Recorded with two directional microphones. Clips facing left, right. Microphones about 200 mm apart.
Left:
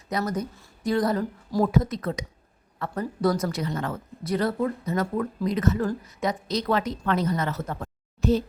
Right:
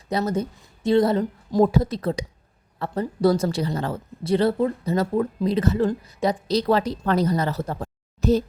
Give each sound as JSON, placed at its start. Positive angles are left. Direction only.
{"t": 0.1, "sound": "a woman's voice", "side_deg": -30}